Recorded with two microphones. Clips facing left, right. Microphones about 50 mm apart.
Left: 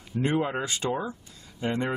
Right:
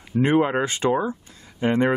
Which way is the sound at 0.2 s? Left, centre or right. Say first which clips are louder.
Right 7 dB; right.